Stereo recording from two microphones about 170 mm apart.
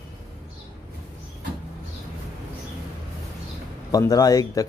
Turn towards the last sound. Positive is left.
turn(degrees=20)  # may be behind; listen again after turning